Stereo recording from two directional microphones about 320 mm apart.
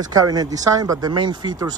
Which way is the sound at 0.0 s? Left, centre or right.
Centre.